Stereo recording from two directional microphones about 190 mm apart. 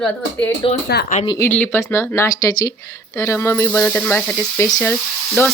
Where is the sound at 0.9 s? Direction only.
60° left (ahead or behind).